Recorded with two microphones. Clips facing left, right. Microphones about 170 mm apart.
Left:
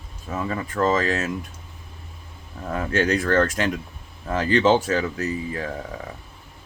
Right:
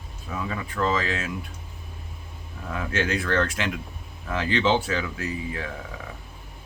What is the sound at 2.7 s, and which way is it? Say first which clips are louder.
Speech: left 5 dB; 40° left (ahead or behind).